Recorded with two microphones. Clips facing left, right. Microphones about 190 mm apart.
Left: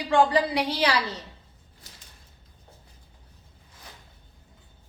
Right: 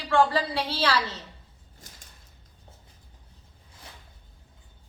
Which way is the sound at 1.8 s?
50° right (ahead or behind).